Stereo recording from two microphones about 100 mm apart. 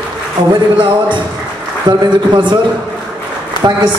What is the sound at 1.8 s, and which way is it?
Speech, 50° right (ahead or behind).